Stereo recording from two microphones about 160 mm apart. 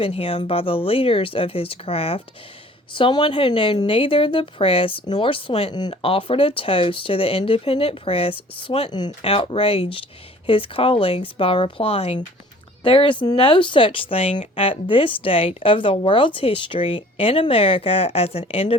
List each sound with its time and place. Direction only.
0.0 s a woman's voice: 35° left (ahead or behind)